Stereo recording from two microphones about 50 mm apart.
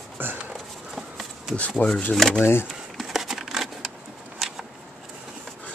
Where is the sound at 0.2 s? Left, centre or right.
Right.